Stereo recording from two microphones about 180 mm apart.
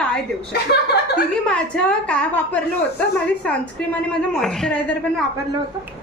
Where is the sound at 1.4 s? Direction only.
5° left (ahead or behind).